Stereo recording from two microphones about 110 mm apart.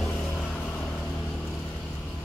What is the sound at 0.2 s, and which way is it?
Vehicle, 10° left (ahead or behind).